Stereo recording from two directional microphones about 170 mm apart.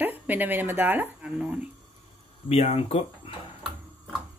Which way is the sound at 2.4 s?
35° left (ahead or behind).